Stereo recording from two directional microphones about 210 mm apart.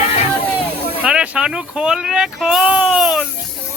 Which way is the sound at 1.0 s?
5° right (ahead or behind).